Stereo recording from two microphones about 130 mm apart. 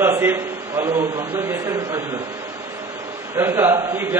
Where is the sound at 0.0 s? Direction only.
20° right (ahead or behind).